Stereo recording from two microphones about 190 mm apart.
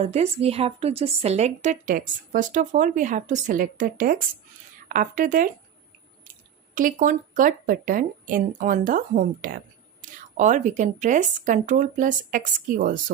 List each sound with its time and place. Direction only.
0.0 s a woman's voice: 35° right (ahead or behind)
6.7 s speech: 45° right (ahead or behind)